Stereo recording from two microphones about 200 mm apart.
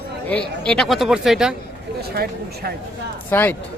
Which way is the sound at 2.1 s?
50° right (ahead or behind).